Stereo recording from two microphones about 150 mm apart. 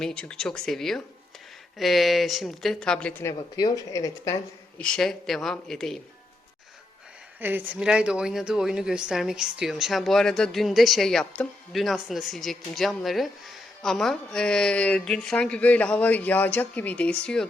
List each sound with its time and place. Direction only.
0.0 s a woman's voice: 5° left (ahead or behind)
3.3 s speech: 25° left (ahead or behind)
4.8 s a woman's voice: 5° left (ahead or behind)
7.3 s a woman's voice: 10° right (ahead or behind); by 17.5 s 5° left (ahead or behind)